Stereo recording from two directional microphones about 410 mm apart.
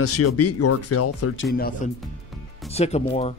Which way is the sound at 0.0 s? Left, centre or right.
Left.